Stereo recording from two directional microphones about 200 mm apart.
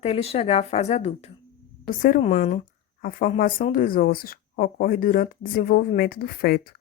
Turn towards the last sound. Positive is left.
turn(degrees=50)  # may be behind; listen again after turning